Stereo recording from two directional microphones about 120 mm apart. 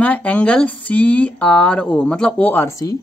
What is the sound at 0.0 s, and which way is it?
Speech, 10° left (ahead or behind).